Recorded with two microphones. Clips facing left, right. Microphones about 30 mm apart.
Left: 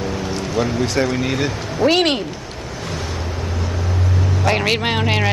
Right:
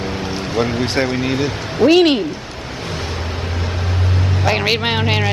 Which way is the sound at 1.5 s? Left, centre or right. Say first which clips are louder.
Right 3 dB; right.